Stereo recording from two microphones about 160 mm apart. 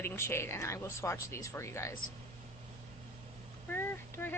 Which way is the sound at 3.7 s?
15° left (ahead or behind).